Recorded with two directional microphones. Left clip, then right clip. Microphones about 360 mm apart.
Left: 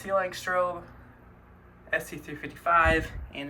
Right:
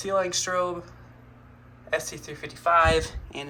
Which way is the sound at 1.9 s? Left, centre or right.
Centre.